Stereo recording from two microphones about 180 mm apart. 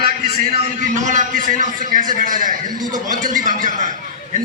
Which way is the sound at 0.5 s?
45° right (ahead or behind).